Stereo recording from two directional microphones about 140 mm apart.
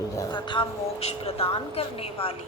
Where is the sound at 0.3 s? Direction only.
35° left (ahead or behind).